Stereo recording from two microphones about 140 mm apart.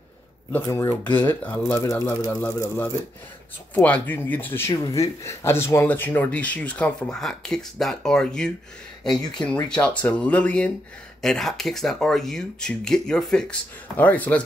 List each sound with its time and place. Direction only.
0.7 s speech: 20° left (ahead or behind)